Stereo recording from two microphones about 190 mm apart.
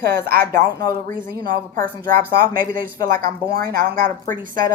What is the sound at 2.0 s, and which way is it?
Speech, 50° right (ahead or behind).